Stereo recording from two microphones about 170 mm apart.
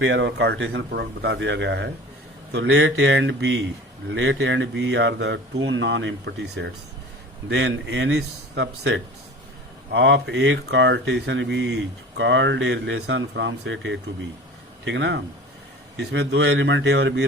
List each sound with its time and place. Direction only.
0.0 s speech: 90° right